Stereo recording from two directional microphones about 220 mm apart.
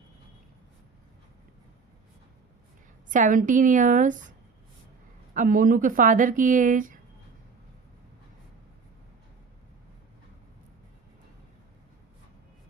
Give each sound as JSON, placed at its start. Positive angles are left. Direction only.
{"t": 3.1, "sound": "speech", "side_deg": -35}
{"t": 5.3, "sound": "speech", "side_deg": -35}